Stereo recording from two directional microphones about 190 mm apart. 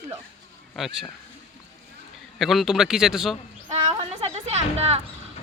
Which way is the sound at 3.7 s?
35° right (ahead or behind).